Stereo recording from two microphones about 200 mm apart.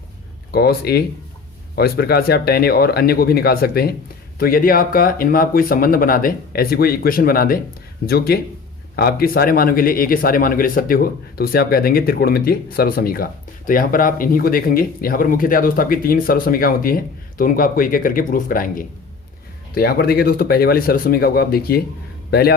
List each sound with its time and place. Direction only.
0.5 s a man's voice: 50° left (ahead or behind)